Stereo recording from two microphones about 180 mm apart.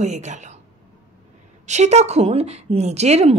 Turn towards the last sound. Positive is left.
turn(degrees=-35)  # may be behind; listen again after turning